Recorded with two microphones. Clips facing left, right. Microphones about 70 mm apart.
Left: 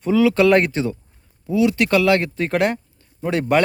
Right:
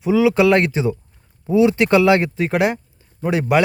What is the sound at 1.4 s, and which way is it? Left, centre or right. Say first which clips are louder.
Speech: right 3 dB; right.